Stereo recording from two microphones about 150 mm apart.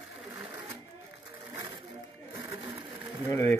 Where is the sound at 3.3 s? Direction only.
15° left (ahead or behind).